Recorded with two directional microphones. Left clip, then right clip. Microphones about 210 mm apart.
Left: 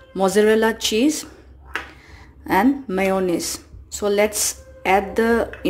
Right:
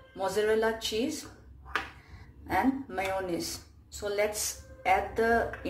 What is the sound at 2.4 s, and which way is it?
A woman's voice, 50° left (ahead or behind).